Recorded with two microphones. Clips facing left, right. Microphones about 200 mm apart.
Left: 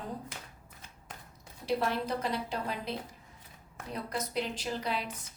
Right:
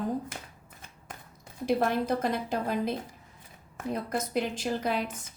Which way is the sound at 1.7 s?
50° right (ahead or behind).